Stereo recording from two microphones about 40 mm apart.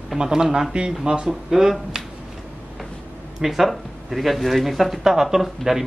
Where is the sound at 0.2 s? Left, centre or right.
Centre.